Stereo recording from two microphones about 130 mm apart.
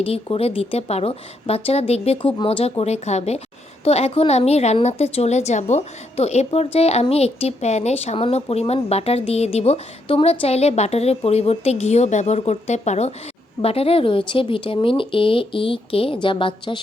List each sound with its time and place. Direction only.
0.0 s a woman's voice: 50° left (ahead or behind)
13.6 s a woman's voice: 50° left (ahead or behind)